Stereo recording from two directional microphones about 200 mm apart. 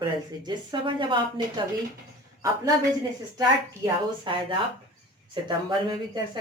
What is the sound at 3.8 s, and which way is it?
Speech, 25° right (ahead or behind).